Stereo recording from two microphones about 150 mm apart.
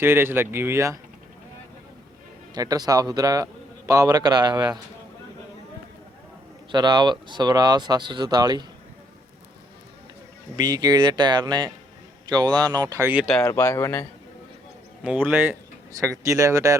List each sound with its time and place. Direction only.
0.0 s speech: 15° right (ahead or behind)
2.6 s a man's voice: 25° right (ahead or behind)
6.7 s a man's voice: 30° right (ahead or behind)
10.6 s a man's voice: 25° right (ahead or behind)
13.4 s speech: 20° left (ahead or behind)
15.0 s a man's voice: 10° right (ahead or behind)